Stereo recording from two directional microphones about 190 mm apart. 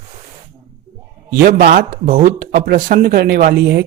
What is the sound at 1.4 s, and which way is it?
Speech, 50° right (ahead or behind).